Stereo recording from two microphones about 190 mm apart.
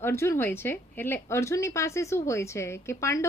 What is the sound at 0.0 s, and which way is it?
Speech, 15° left (ahead or behind).